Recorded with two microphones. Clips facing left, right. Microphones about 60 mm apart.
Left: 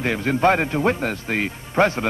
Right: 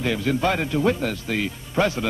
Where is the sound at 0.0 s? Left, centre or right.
Left.